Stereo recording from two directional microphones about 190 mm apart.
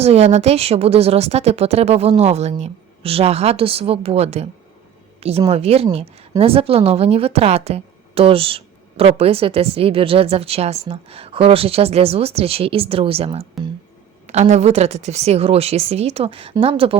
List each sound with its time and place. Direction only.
0.0 s a woman's voice: 30° right (ahead or behind)
5.5 s a woman's voice: 30° right (ahead or behind)